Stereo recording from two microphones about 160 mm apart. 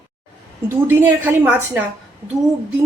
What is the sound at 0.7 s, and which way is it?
Speech, 15° right (ahead or behind).